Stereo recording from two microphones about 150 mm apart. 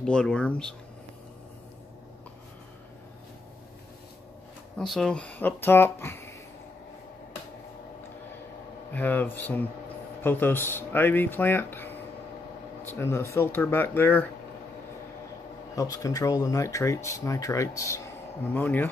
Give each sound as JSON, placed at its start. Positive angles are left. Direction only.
{"t": 0.0, "sound": "speech", "side_deg": 5}
{"t": 4.7, "sound": "speech", "side_deg": 0}
{"t": 8.9, "sound": "speech", "side_deg": 10}
{"t": 15.7, "sound": "speech", "side_deg": 25}